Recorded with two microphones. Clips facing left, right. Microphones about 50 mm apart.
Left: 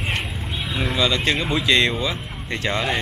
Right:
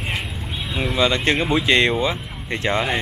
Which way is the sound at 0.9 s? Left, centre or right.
Right.